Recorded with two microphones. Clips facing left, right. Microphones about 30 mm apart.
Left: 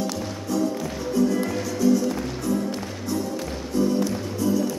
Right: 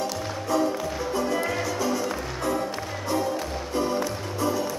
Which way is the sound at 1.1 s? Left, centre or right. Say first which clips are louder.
Left 4 dB; right.